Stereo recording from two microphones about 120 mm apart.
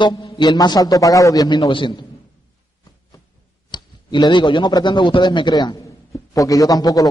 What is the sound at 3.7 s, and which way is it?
A man's voice, 40° left (ahead or behind).